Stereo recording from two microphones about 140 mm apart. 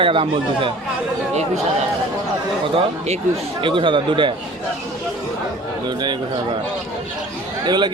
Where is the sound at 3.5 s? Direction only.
35° right (ahead or behind).